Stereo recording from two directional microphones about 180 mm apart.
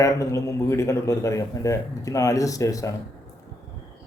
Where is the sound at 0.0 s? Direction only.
15° left (ahead or behind).